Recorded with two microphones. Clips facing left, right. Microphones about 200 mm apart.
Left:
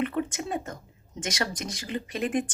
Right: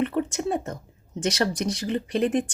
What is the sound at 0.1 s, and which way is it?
Speech, 35° right (ahead or behind).